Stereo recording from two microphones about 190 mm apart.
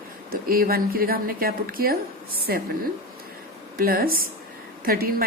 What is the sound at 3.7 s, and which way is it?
A woman's voice, 50° right (ahead or behind).